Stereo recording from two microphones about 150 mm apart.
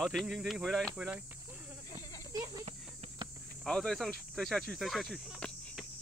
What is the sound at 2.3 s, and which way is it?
Speech, 25° right (ahead or behind).